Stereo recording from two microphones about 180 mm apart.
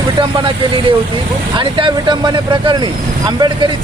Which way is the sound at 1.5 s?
25° right (ahead or behind).